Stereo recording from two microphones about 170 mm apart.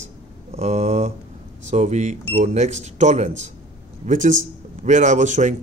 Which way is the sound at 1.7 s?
40° right (ahead or behind).